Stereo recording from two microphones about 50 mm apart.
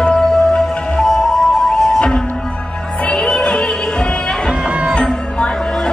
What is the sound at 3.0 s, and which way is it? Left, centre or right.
Music, centre.